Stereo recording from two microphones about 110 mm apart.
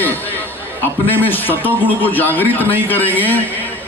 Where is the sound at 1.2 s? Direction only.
15° left (ahead or behind).